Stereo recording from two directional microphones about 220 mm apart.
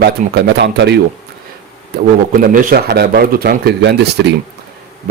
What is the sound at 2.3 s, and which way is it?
Speech, 40° right (ahead or behind).